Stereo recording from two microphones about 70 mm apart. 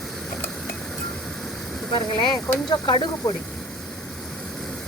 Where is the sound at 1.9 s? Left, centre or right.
Left.